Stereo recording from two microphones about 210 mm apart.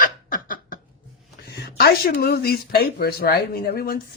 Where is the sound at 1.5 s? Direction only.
50° left (ahead or behind).